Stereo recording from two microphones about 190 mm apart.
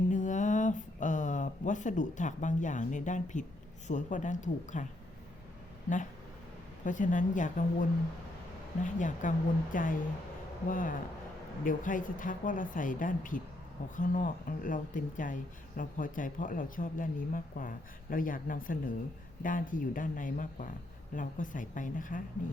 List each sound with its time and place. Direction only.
0.1 s a sound: 40° left (ahead or behind)
3.8 s speech: 40° left (ahead or behind)
6.8 s speech: 40° left (ahead or behind)